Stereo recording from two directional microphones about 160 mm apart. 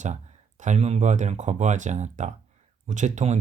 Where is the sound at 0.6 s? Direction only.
45° right (ahead or behind).